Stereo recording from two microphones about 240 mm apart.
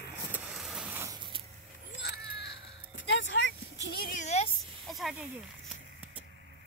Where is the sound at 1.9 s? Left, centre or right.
Left.